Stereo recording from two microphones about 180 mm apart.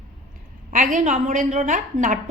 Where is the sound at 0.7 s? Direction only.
45° right (ahead or behind).